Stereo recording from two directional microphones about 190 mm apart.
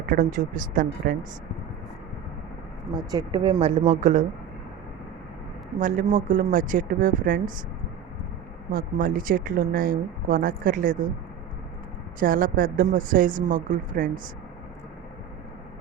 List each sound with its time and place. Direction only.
0.1 s speech: 40° right (ahead or behind)
2.9 s speech: 20° right (ahead or behind); by 4.3 s 40° right (ahead or behind)
5.8 s speech: 45° right (ahead or behind)
8.7 s speech: 45° right (ahead or behind)
12.2 s speech: 50° right (ahead or behind)